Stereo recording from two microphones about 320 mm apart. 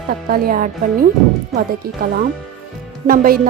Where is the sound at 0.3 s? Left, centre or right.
Right.